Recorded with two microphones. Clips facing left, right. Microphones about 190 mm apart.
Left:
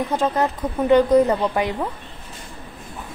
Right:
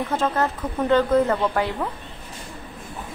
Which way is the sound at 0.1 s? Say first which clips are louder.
Left 1 dB; 15° left (ahead or behind).